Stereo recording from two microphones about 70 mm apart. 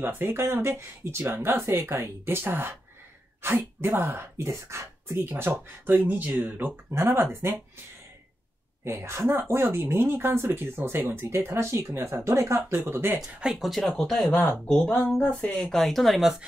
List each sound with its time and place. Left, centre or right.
0.0 s speech: right
8.8 s speech: right
13.2 s speech: centre